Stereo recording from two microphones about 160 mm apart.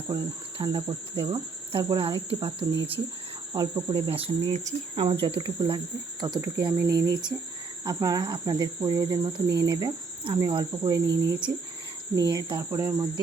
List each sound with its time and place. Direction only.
0.1 s speech: 25° right (ahead or behind)
4.5 s speech: 40° right (ahead or behind); by 13.1 s 25° right (ahead or behind)